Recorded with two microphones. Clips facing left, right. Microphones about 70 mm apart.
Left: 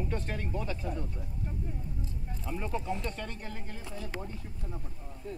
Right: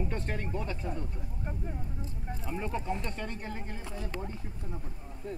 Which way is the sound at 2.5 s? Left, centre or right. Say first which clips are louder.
Even; centre.